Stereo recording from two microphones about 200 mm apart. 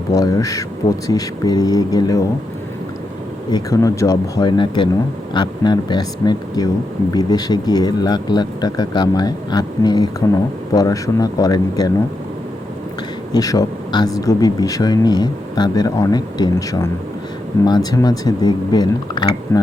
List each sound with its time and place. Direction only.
0.1 s speech: 15° left (ahead or behind)
3.5 s speech: 15° left (ahead or behind)
13.3 s speech: 20° left (ahead or behind)